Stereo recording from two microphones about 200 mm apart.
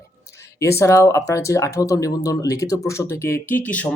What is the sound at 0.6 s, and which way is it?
Speech, 15° left (ahead or behind).